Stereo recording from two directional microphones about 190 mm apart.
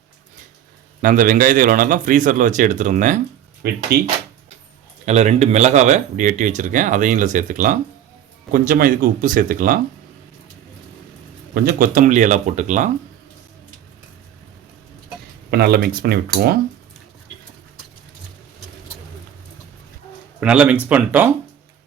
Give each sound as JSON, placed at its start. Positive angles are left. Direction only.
{"t": 1.0, "sound": "a man's voice", "side_deg": -45}
{"t": 3.6, "sound": "speech", "side_deg": -55}
{"t": 5.0, "sound": "a man's voice", "side_deg": -35}
{"t": 11.5, "sound": "speech", "side_deg": -50}
{"t": 15.4, "sound": "speech", "side_deg": -55}
{"t": 20.4, "sound": "speech", "side_deg": -5}